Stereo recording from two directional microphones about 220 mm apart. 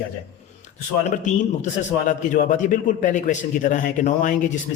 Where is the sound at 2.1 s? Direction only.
35° left (ahead or behind).